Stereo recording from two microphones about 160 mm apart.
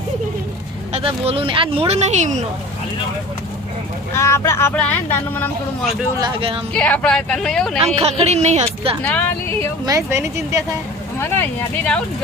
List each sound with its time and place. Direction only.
0.9 s speech: 40° right (ahead or behind)
4.1 s speech: 15° left (ahead or behind)
6.7 s speech: 10° left (ahead or behind)
7.8 s speech: 40° right (ahead or behind)
9.0 s speech: 10° left (ahead or behind)
9.8 s speech: 20° right (ahead or behind)
11.2 s speech: 10° left (ahead or behind)